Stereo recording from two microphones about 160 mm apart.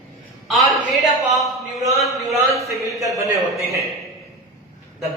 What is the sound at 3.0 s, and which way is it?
Speech, 20° right (ahead or behind).